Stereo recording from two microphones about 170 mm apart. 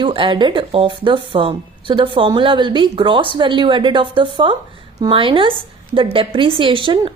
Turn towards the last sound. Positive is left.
turn(degrees=-30)  # may be behind; listen again after turning